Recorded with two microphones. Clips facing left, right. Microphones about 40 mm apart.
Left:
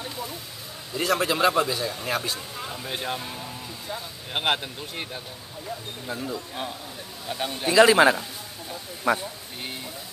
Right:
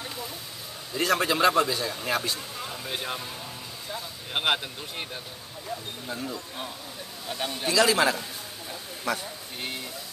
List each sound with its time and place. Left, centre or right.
0.9 s a man's voice: centre
7.6 s a man's voice: left